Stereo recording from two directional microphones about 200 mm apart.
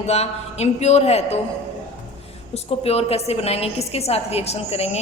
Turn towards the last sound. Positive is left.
turn(degrees=30)  # may be behind; listen again after turning